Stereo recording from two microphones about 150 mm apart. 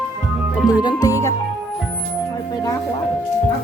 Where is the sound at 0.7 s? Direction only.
25° left (ahead or behind).